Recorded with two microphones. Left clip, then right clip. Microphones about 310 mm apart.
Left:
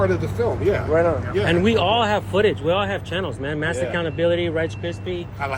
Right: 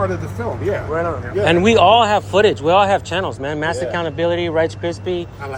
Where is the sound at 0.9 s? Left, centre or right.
Left.